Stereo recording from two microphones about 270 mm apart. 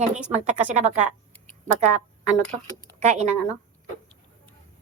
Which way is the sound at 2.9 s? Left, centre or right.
Right.